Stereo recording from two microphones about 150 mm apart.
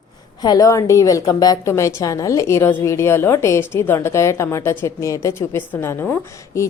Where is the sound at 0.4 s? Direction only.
25° left (ahead or behind).